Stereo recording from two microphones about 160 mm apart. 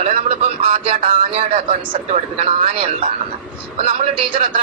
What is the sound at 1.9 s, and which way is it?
Speech, 50° right (ahead or behind).